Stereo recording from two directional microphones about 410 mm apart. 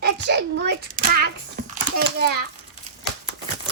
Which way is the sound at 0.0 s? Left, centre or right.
Right.